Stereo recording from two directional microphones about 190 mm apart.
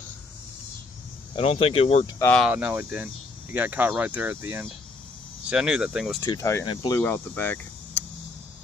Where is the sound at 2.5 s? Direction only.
10° right (ahead or behind).